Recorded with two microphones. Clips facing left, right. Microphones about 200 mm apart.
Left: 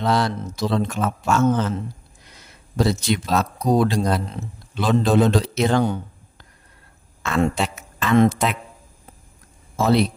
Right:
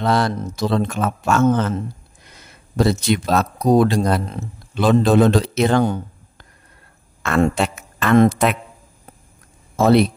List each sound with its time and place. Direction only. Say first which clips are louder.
0.0 s speech: right 2 dB; 55° right (ahead or behind)
2.8 s speech: right 3 dB; 55° right (ahead or behind)
7.2 s a woman's voice: right 3 dB; 55° right (ahead or behind)
9.8 s a man's voice: right 4 dB; 55° right (ahead or behind)